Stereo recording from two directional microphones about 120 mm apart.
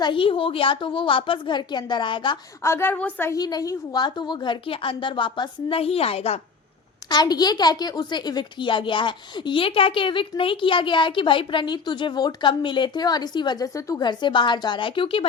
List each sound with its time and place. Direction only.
0.0 s a woman's voice: 45° left (ahead or behind)
2.6 s a woman's voice: 20° left (ahead or behind)
3.3 s a woman's voice: 35° left (ahead or behind); by 6.4 s 60° left (ahead or behind)
7.1 s a woman's voice: 35° left (ahead or behind)